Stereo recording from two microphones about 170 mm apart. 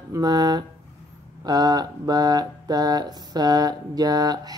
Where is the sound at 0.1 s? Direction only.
25° right (ahead or behind).